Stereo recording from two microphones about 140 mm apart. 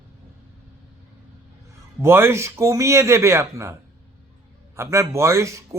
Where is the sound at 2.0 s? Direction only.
15° right (ahead or behind).